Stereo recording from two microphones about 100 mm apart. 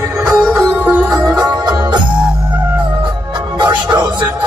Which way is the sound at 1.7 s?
45° right (ahead or behind).